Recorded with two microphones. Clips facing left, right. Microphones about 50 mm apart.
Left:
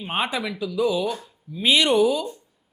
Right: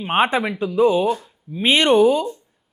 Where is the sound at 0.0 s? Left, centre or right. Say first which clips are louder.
Right 7 dB; right.